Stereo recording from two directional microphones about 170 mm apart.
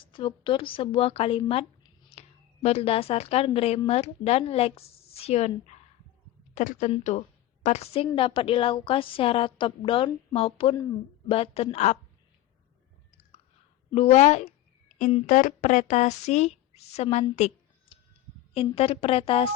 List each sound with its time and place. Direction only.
0.0 s a woman's voice: 30° left (ahead or behind)
13.9 s a sound: 40° left (ahead or behind)
15.3 s a woman's voice: 50° left (ahead or behind); by 19.5 s 35° left (ahead or behind)